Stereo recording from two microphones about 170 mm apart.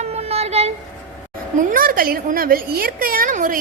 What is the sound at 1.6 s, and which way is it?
A woman's voice, 55° right (ahead or behind).